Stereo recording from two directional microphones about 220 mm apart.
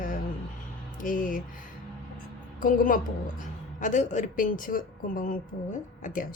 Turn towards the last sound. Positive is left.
turn(degrees=35)  # may be behind; listen again after turning